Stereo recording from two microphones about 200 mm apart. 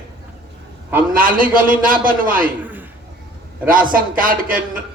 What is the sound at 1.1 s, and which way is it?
A man's voice, 45° right (ahead or behind).